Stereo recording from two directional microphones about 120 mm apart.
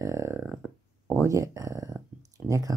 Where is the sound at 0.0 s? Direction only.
25° right (ahead or behind).